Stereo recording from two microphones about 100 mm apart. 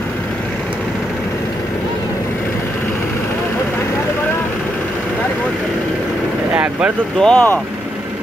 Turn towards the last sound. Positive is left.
turn(degrees=10)  # may be behind; listen again after turning